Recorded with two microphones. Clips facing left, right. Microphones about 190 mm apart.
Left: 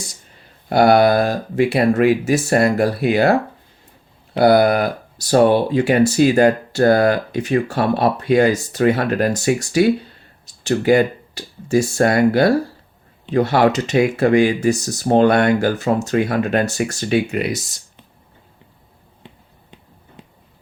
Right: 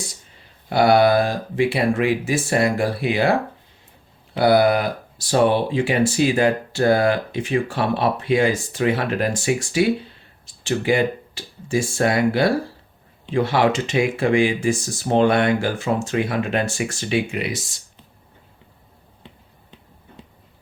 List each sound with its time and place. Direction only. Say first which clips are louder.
0.7 s speech: left 2 dB; 45° left (ahead or behind)
4.4 s speech: left 3 dB; 45° left (ahead or behind)